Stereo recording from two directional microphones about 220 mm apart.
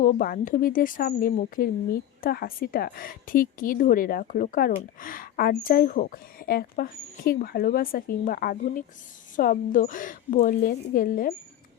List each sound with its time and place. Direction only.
0.0 s speech: 40° left (ahead or behind)